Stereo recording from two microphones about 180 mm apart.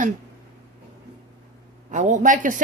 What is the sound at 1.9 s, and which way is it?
Speech, 45° right (ahead or behind).